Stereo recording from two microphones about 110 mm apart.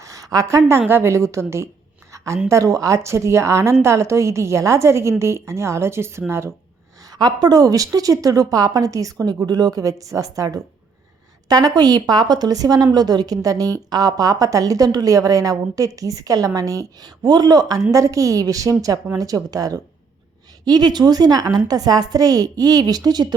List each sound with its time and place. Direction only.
0.0 s a woman's voice: 30° right (ahead or behind)
2.1 s a sound: 30° right (ahead or behind)
2.5 s a woman's voice: 30° right (ahead or behind)
7.1 s a woman's voice: 35° right (ahead or behind)